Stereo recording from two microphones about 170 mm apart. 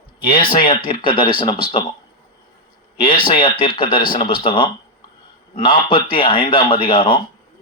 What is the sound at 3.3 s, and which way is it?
A man's voice, 30° left (ahead or behind).